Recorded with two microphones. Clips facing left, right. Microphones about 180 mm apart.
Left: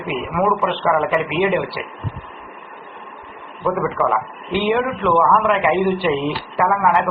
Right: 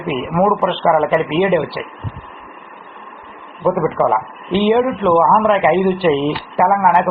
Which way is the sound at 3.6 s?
25° right (ahead or behind).